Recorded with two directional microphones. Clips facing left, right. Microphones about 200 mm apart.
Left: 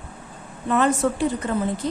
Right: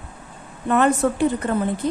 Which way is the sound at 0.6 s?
55° right (ahead or behind).